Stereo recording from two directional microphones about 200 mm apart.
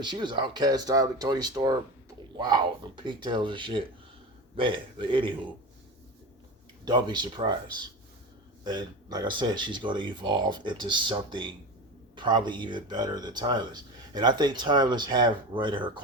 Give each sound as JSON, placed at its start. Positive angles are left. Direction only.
{"t": 0.0, "sound": "speech", "side_deg": -20}
{"t": 6.8, "sound": "speech", "side_deg": -20}
{"t": 8.6, "sound": "speech", "side_deg": -20}